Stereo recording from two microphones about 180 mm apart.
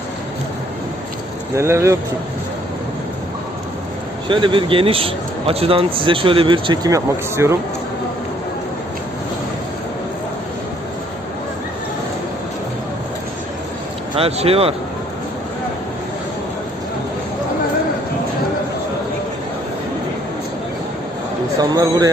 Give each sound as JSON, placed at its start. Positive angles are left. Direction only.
{"t": 1.5, "sound": "speech", "side_deg": -15}
{"t": 4.3, "sound": "a man's voice", "side_deg": -25}
{"t": 14.2, "sound": "speech", "side_deg": -35}
{"t": 21.6, "sound": "a man's voice", "side_deg": -20}